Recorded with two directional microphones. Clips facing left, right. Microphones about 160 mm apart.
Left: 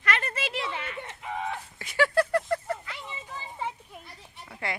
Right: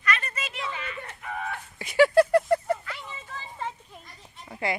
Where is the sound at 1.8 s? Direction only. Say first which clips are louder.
Right 6 dB; 15° right (ahead or behind).